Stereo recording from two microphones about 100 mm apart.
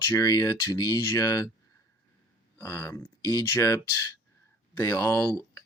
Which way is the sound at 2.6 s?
30° left (ahead or behind).